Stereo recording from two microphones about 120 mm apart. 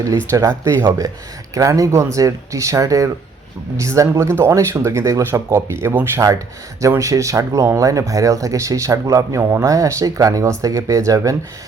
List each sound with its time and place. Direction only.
0.6 s speech: 25° right (ahead or behind)